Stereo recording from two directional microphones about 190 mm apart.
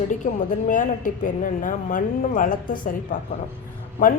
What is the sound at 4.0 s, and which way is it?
Speech, 45° left (ahead or behind).